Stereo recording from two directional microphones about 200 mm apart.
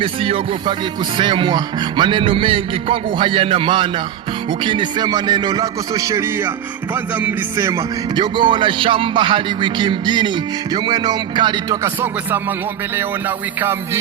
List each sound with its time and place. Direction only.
0.0 s music: 25° right (ahead or behind); by 14.0 s 10° right (ahead or behind)